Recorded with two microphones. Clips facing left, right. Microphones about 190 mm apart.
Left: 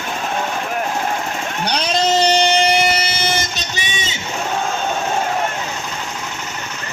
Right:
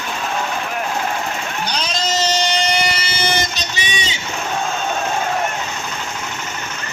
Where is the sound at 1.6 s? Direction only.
60° left (ahead or behind).